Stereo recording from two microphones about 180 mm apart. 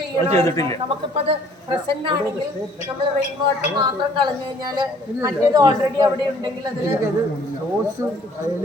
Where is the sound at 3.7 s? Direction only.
25° right (ahead or behind).